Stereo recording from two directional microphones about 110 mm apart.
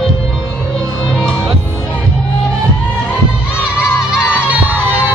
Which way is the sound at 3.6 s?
10° right (ahead or behind).